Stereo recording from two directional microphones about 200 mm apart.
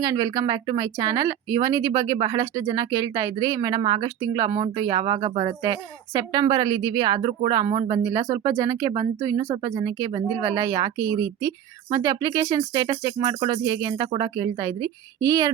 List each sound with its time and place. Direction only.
0.0 s a woman's voice: 20° right (ahead or behind)